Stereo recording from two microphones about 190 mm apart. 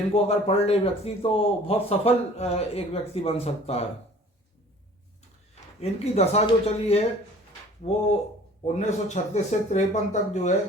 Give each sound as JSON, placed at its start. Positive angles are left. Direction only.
{"t": 0.3, "sound": "speech", "side_deg": 35}
{"t": 5.8, "sound": "speech", "side_deg": 35}